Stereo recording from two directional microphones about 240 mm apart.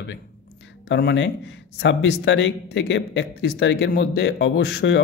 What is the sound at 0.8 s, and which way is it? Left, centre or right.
Speech, left.